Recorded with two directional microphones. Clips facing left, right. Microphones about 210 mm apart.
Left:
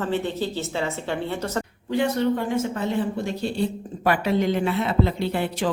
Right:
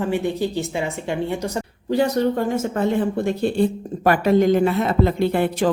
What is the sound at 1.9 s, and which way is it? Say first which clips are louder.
Speech: right 3 dB; 40° right (ahead or behind).